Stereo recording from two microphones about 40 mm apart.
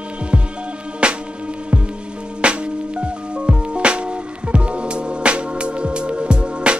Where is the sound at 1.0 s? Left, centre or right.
Right.